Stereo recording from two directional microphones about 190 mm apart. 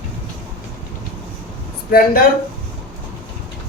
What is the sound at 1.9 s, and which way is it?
Speech, 50° left (ahead or behind).